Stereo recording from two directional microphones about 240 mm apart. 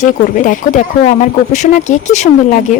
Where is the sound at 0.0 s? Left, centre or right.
Left.